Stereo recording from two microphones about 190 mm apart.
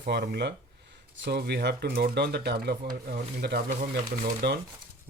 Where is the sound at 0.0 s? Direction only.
60° right (ahead or behind).